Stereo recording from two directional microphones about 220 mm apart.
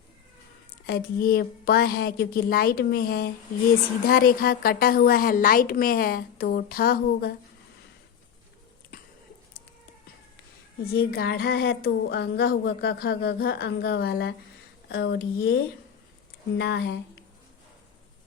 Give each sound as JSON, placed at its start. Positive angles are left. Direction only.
{"t": 0.9, "sound": "a woman's voice", "side_deg": 45}
{"t": 10.9, "sound": "speech", "side_deg": 45}